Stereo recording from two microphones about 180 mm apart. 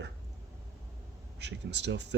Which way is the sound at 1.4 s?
70° right (ahead or behind).